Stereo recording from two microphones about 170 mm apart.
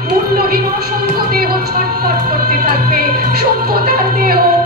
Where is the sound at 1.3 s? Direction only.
65° right (ahead or behind).